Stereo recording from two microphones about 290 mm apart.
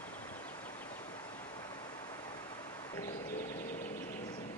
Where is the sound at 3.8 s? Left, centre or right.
Left.